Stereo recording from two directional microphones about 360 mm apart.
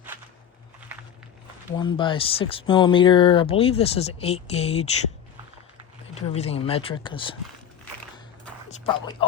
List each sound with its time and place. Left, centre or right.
1.7 s speech: centre
6.1 s speech: centre
8.8 s speech: centre